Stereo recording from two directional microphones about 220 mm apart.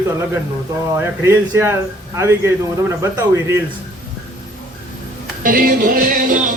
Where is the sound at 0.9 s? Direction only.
10° right (ahead or behind).